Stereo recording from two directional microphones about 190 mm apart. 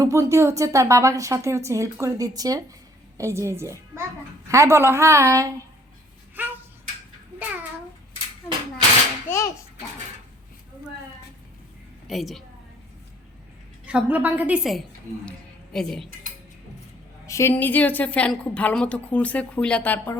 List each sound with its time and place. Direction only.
0.0 s a woman's voice: 15° right (ahead or behind)
6.4 s tick-tock: 10° right (ahead or behind)
9.3 s a sound: 10° left (ahead or behind)
12.0 s a woman's voice: centre (ahead or behind)
13.8 s a woman's voice: 5° right (ahead or behind)
15.3 s music: 5° left (ahead or behind)
17.2 s a woman's voice: 15° left (ahead or behind)